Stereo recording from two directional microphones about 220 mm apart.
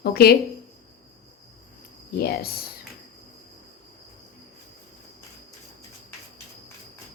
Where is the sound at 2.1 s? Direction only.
45° left (ahead or behind).